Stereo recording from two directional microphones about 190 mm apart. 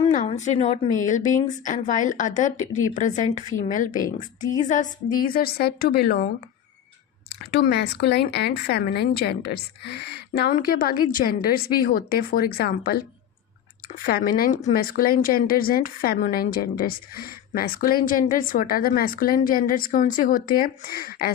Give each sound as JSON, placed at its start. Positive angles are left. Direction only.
{"t": 0.1, "sound": "a woman's voice", "side_deg": 40}
{"t": 7.5, "sound": "a woman's voice", "side_deg": 55}